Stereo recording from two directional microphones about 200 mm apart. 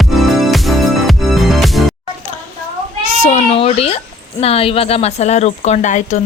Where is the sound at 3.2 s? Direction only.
30° left (ahead or behind).